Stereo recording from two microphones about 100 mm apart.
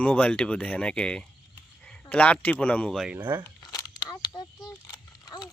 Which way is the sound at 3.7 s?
40° left (ahead or behind).